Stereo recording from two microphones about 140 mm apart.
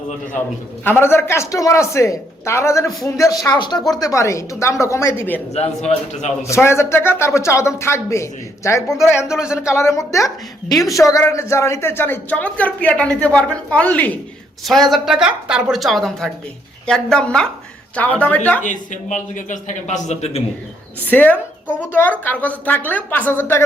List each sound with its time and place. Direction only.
0.9 s speech: 15° left (ahead or behind)
5.5 s a man's voice: 50° left (ahead or behind)
6.5 s speech: 20° left (ahead or behind)
9.3 s a woman's voice: 5° right (ahead or behind)
9.6 s speech: 20° left (ahead or behind)
14.7 s a woman's voice: centre (ahead or behind)
18.6 s a man's voice: 60° left (ahead or behind)
21.1 s speech: 10° left (ahead or behind)